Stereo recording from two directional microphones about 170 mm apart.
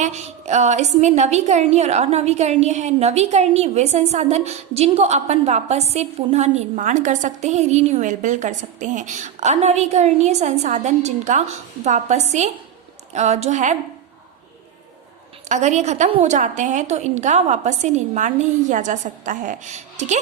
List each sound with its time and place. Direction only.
0.0 s a woman's voice: 40° right (ahead or behind)
15.4 s a woman's voice: 45° right (ahead or behind)